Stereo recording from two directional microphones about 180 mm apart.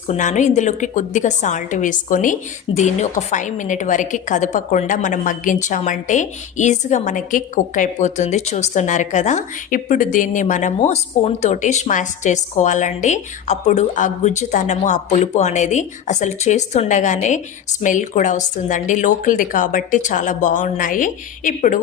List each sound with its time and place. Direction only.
0.1 s a woman's voice: 40° left (ahead or behind)